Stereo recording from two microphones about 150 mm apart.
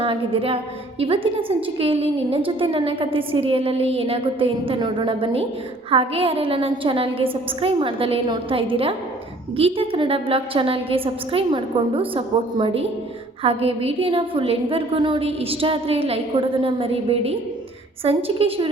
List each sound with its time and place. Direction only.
0.0 s a woman's voice: 35° right (ahead or behind)